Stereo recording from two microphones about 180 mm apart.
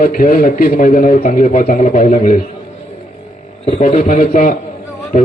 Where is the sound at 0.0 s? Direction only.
50° left (ahead or behind).